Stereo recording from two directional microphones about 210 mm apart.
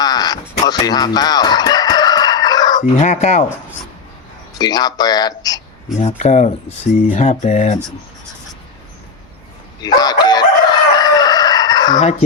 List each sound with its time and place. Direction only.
0.0 s crow: 20° left (ahead or behind)
0.6 s crowing: 20° left (ahead or behind)
3.0 s speech: 30° left (ahead or behind)
4.5 s speech: 20° left (ahead or behind)
5.9 s speech: 35° left (ahead or behind)
9.8 s crowing: 20° left (ahead or behind)